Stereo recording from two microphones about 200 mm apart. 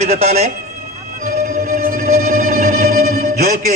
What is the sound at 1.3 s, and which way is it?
Music, 45° right (ahead or behind).